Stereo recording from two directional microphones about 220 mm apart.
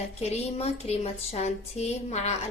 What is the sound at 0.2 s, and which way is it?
A woman's voice, 30° left (ahead or behind).